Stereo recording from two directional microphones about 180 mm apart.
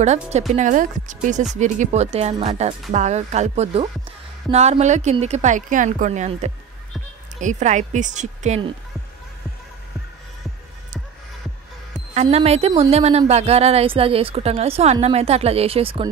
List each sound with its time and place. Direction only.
0.0 s a woman's voice: 40° right (ahead or behind)
12.1 s a woman's voice: 35° right (ahead or behind)